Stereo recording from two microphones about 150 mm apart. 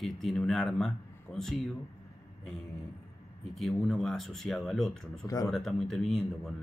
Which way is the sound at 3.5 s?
Centre (ahead or behind).